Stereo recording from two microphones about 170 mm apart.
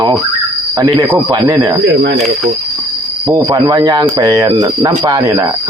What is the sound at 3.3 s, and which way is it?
Speech, 20° right (ahead or behind).